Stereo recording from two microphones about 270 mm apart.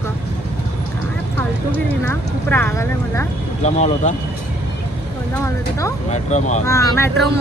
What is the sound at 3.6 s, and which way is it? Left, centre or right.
Speech, left.